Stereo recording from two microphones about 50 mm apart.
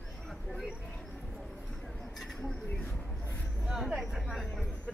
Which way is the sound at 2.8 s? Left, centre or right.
Left.